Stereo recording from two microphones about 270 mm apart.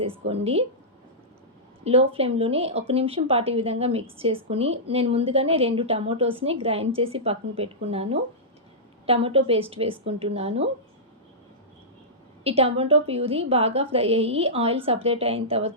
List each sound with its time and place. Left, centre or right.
0.0 s speech: right
1.8 s speech: right
12.4 s speech: right